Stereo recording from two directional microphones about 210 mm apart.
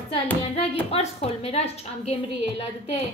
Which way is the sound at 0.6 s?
30° left (ahead or behind).